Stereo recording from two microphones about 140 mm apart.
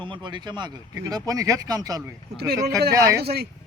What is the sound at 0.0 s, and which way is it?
Speech, 35° right (ahead or behind).